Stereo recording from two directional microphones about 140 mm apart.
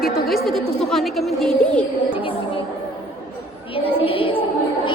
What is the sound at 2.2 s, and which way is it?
Music, 40° left (ahead or behind).